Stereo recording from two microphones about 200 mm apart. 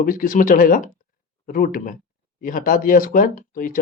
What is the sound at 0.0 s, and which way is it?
Speech, 45° left (ahead or behind).